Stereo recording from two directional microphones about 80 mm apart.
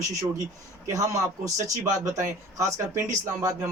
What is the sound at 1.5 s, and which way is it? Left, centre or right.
Speech, right.